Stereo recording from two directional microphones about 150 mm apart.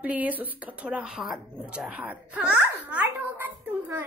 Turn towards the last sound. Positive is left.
turn(degrees=-15)  # may be behind; listen again after turning